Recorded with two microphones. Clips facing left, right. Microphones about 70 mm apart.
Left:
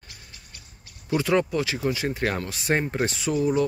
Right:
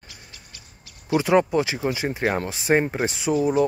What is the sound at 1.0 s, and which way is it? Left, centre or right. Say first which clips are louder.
Speech: right 4 dB; centre.